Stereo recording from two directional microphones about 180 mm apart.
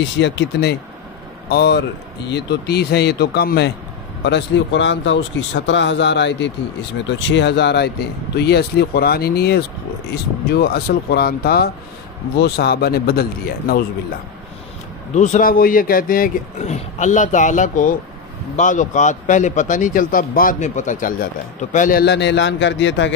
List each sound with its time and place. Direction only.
0.2 s a man's voice: 75° left (ahead or behind)
15.1 s speech: 40° left (ahead or behind)
22.0 s a man's voice: 75° left (ahead or behind); by 23.1 s 90° left